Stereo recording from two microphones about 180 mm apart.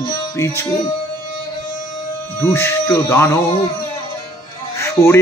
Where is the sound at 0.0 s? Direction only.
20° left (ahead or behind).